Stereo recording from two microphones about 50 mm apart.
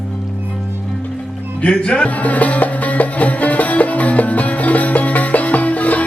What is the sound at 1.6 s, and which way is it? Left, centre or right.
Music, left.